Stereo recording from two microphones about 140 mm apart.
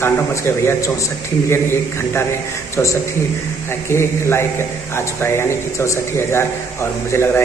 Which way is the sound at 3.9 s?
20° left (ahead or behind).